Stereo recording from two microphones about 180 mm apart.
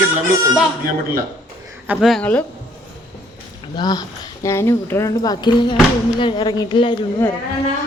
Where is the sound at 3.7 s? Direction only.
25° left (ahead or behind).